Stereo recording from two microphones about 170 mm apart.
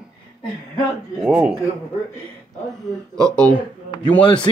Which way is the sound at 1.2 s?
5° right (ahead or behind).